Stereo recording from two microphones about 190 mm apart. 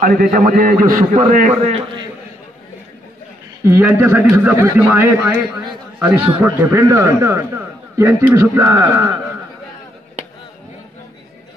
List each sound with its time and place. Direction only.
0.0 s a man's voice: 45° right (ahead or behind)
3.6 s a man's voice: 10° right (ahead or behind)